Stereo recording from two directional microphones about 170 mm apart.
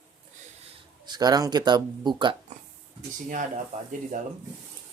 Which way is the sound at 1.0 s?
25° right (ahead or behind).